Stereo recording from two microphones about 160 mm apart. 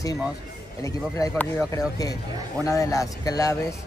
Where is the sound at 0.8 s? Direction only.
20° left (ahead or behind).